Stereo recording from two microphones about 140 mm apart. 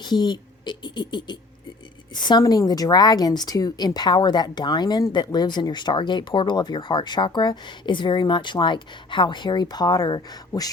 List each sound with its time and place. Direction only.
0.0 s speech: 30° left (ahead or behind)